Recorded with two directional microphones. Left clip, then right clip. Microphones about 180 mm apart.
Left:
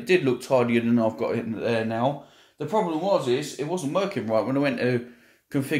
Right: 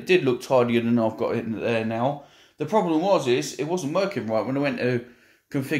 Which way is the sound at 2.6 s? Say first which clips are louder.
Right 3 dB; 30° right (ahead or behind).